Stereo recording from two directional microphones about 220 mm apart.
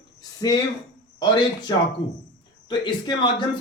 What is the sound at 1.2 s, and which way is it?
A man's voice, 20° left (ahead or behind).